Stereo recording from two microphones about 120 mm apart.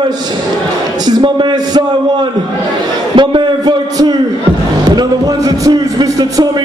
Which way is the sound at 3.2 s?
40° right (ahead or behind).